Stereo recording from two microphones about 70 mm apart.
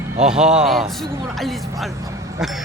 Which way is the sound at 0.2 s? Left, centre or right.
Centre.